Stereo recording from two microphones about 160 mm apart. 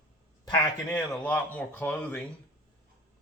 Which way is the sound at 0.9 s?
10° left (ahead or behind).